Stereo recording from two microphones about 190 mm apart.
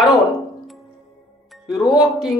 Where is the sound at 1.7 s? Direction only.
20° left (ahead or behind).